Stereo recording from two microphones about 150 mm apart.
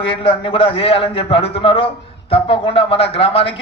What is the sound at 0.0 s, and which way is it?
A man's voice, 35° left (ahead or behind).